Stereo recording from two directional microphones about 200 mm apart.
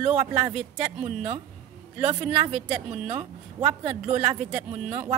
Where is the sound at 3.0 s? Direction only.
35° right (ahead or behind).